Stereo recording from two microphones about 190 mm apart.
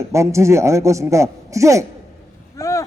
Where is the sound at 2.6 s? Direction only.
15° left (ahead or behind).